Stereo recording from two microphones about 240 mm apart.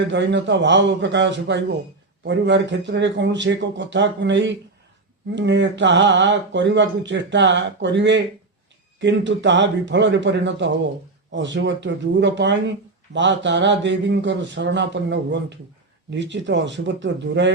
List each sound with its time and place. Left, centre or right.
0.1 s speech: right